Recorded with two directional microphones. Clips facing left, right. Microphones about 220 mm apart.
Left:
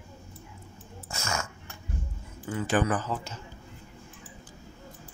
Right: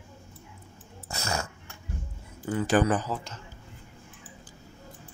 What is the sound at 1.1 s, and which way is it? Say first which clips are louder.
Dog: right 2 dB; 35° right (ahead or behind).